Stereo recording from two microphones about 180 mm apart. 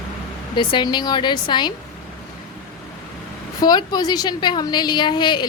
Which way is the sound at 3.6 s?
25° left (ahead or behind).